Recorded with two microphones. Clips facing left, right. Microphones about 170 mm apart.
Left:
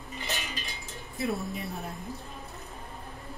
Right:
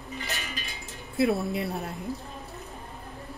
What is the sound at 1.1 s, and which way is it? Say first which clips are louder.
Speech: right 7 dB; 70° right (ahead or behind).